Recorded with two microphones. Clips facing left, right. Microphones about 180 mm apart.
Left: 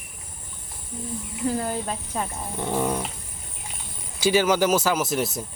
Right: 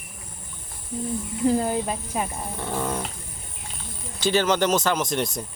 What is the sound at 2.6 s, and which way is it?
Dog, 15° left (ahead or behind).